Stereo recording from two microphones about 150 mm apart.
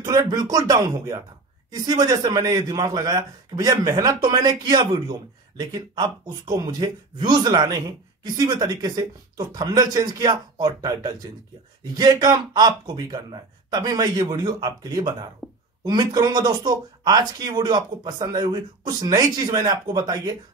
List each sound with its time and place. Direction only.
0.0 s speech: 25° right (ahead or behind)